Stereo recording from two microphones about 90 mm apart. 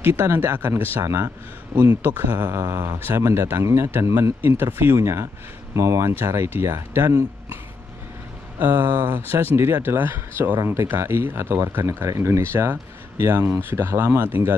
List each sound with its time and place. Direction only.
0.0 s speech: 25° right (ahead or behind)
8.5 s speech: 20° right (ahead or behind)